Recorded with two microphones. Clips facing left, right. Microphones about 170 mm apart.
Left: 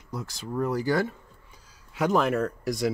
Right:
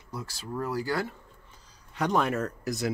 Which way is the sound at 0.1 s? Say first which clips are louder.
Left 3 dB; 20° left (ahead or behind).